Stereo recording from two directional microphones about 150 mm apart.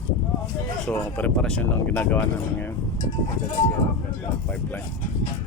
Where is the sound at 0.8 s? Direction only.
10° left (ahead or behind).